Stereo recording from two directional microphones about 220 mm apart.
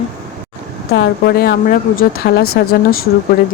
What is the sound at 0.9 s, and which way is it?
A woman's voice, 45° left (ahead or behind).